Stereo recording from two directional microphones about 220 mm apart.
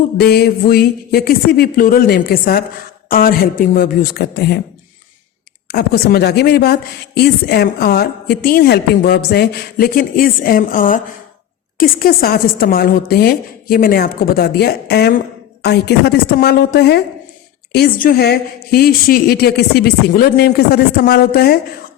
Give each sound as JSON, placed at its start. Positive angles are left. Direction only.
{"t": 0.2, "sound": "speech", "side_deg": 45}
{"t": 5.6, "sound": "speech", "side_deg": 45}